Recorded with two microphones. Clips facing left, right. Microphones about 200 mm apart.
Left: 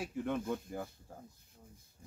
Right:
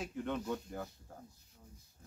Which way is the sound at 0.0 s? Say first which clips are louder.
Left 2 dB; 5° left (ahead or behind).